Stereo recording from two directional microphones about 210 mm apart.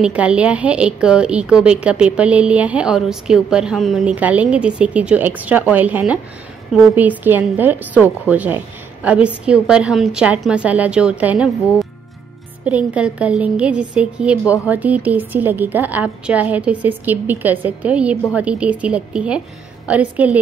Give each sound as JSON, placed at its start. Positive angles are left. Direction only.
{"t": 0.0, "sound": "a woman's voice", "side_deg": -5}